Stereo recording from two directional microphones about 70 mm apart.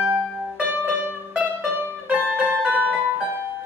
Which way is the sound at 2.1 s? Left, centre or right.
Right.